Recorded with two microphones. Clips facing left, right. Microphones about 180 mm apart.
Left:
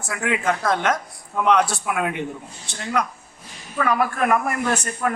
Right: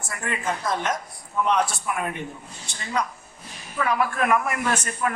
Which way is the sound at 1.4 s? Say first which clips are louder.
Left 4 dB; 80° left.